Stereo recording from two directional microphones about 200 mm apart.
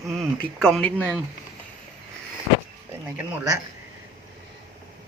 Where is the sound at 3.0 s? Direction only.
10° right (ahead or behind).